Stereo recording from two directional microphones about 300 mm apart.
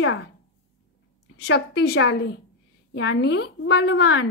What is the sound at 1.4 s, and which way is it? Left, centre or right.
Speech, left.